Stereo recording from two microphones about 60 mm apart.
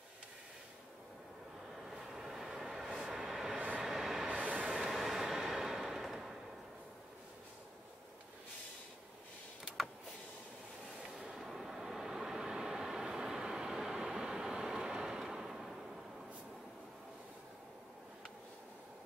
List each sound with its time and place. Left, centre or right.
1.8 s train: centre
3.0 s vehicle: centre
3.5 s train: right
3.8 s train: centre
4.4 s train: right
5.5 s a sound: centre
11.1 s vehicle: centre